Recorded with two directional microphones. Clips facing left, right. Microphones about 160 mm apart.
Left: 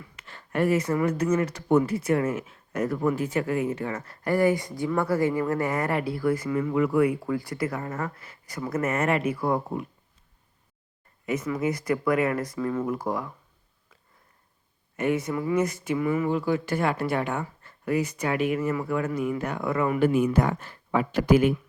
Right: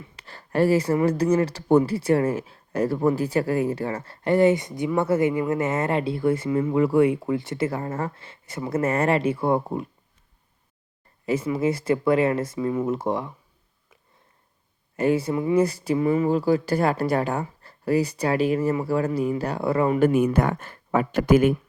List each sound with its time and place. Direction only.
0.0 s speech: 35° right (ahead or behind)
11.3 s speech: 30° right (ahead or behind)
14.9 s speech: 30° right (ahead or behind)
20.0 s speech: 50° right (ahead or behind)